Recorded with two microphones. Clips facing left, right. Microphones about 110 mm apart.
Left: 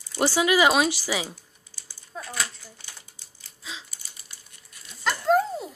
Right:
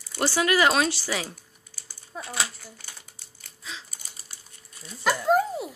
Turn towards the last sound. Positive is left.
turn(degrees=-5)  # may be behind; listen again after turning